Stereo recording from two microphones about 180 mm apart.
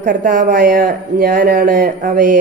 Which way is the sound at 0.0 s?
45° right (ahead or behind).